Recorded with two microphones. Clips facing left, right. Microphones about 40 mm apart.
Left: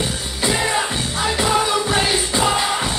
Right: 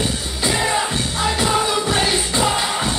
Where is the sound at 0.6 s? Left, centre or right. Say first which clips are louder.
Right 1 dB; centre.